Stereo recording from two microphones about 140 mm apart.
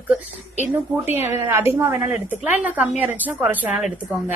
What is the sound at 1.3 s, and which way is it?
Speech, 15° right (ahead or behind).